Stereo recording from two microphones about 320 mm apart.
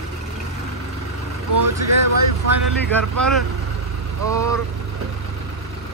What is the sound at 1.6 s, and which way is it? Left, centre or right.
Speech, right.